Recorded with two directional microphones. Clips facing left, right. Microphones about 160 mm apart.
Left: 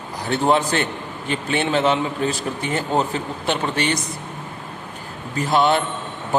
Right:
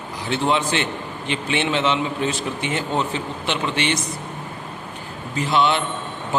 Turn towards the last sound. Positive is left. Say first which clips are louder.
# left 2 dB
turn(degrees=45)  # may be behind; listen again after turning